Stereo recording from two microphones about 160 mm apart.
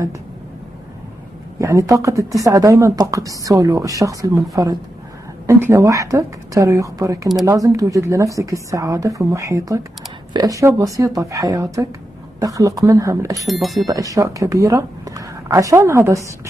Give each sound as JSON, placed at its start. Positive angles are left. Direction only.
{"t": 1.6, "sound": "speech", "side_deg": -20}
{"t": 13.5, "sound": "speech", "side_deg": 0}
{"t": 13.8, "sound": "speech", "side_deg": -20}